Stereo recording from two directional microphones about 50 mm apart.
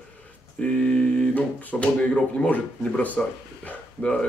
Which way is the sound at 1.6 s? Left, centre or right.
Left.